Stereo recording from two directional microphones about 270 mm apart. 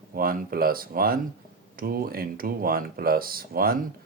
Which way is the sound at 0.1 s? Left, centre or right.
Right.